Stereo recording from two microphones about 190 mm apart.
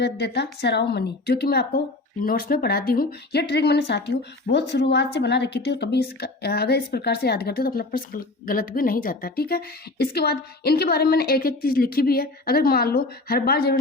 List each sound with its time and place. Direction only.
0.0 s a woman's voice: 60° left (ahead or behind)